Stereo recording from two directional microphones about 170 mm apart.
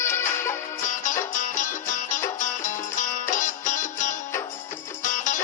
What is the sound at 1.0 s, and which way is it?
Music, 50° left (ahead or behind).